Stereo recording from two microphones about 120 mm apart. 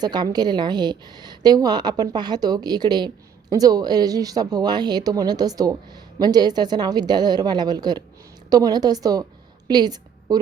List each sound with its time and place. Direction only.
0.0 s a woman's voice: 35° right (ahead or behind)